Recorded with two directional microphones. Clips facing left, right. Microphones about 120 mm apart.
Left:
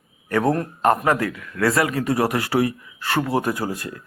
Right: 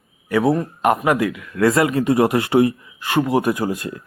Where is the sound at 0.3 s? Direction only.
5° right (ahead or behind).